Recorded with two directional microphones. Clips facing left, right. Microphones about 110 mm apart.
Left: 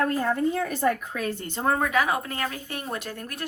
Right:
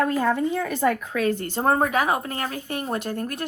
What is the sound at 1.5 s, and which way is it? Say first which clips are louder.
Speech: right 1 dB; 40° right (ahead or behind).